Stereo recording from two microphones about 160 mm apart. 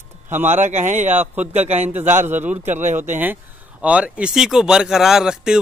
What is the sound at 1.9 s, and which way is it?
Speech, 15° right (ahead or behind).